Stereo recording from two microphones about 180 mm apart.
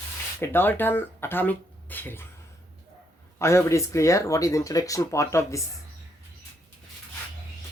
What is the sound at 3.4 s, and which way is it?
Speech, 15° left (ahead or behind).